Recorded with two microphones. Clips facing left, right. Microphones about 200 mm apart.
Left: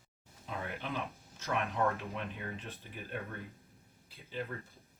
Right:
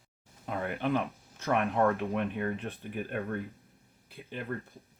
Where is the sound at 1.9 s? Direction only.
55° right (ahead or behind).